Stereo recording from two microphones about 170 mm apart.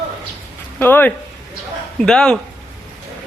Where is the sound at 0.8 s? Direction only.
10° left (ahead or behind).